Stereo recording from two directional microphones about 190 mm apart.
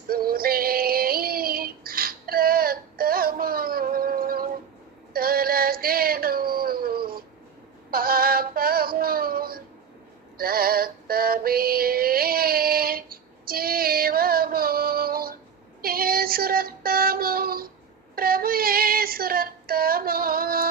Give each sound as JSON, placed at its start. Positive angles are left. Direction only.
{"t": 0.1, "sound": "synthetic singing", "side_deg": -50}
{"t": 5.1, "sound": "dog", "side_deg": -50}
{"t": 7.9, "sound": "synthetic singing", "side_deg": -50}
{"t": 15.8, "sound": "child singing", "side_deg": -50}
{"t": 18.1, "sound": "female singing", "side_deg": -50}